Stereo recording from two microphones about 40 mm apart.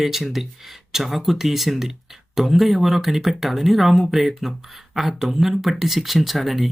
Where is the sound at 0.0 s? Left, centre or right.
Centre.